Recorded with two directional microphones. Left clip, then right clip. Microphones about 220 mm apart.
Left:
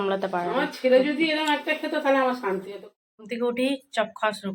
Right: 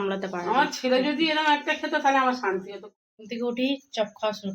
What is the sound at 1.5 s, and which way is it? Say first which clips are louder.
Speech: right 2 dB; 35° right (ahead or behind).